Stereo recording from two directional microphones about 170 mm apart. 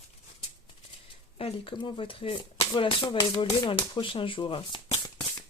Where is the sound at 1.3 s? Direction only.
30° left (ahead or behind).